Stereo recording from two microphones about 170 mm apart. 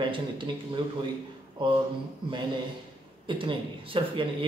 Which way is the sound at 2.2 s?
30° right (ahead or behind).